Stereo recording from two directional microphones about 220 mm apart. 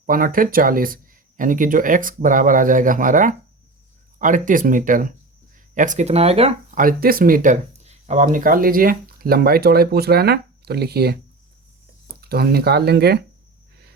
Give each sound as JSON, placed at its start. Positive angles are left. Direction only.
{"t": 0.0, "sound": "speech", "side_deg": -40}
{"t": 6.8, "sound": "speech", "side_deg": -40}
{"t": 12.3, "sound": "speech", "side_deg": -45}